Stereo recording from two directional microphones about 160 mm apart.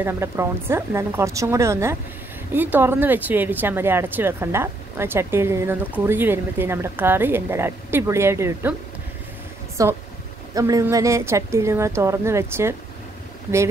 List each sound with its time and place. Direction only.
0.0 s speech: 15° right (ahead or behind)
9.8 s speech: 20° right (ahead or behind)